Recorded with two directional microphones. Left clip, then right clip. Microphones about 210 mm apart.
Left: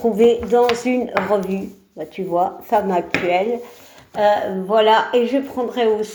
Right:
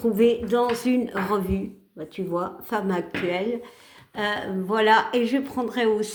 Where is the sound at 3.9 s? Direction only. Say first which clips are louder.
Left 11 dB; 45° right (ahead or behind).